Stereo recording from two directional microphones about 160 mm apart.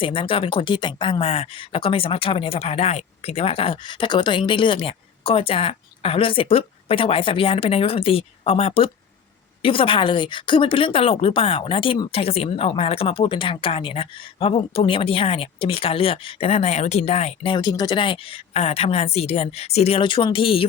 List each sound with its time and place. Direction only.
0.0 s speech: 35° left (ahead or behind)